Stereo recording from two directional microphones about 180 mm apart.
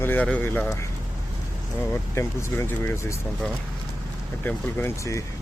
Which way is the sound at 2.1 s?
15° left (ahead or behind).